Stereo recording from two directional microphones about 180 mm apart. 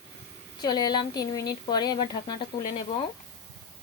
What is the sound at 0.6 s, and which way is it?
A woman's voice, 20° left (ahead or behind).